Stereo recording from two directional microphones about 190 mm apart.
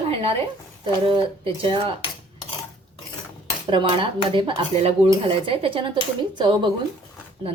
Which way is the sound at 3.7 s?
25° right (ahead or behind).